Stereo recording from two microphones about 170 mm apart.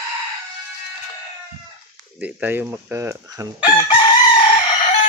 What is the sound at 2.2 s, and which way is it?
Speech, 10° right (ahead or behind).